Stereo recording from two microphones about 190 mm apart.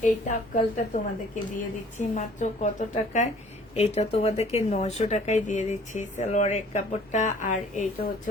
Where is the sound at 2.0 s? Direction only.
40° left (ahead or behind).